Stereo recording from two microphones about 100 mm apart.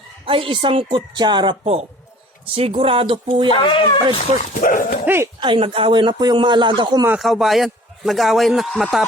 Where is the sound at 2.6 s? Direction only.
70° right (ahead or behind).